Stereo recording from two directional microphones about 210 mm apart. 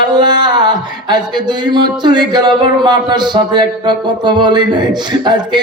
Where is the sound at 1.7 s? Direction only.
20° right (ahead or behind).